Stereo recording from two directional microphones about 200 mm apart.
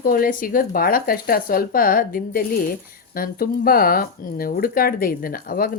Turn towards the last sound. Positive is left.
turn(degrees=45)  # may be behind; listen again after turning